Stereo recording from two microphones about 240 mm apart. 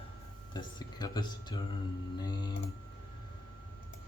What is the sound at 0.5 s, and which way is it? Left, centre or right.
Speech, centre.